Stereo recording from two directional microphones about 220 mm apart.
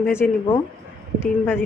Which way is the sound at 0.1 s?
10° left (ahead or behind).